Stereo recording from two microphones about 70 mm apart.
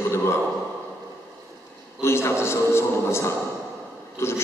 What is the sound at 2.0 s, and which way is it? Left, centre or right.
A man's voice, left.